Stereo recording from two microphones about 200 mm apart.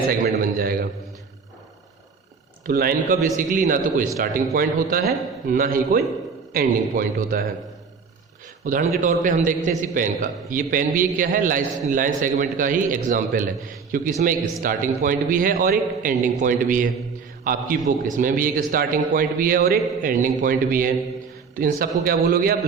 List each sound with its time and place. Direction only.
0.1 s a sound: 45° right (ahead or behind)
2.6 s a man's voice: 45° right (ahead or behind)
8.6 s a man's voice: 40° right (ahead or behind)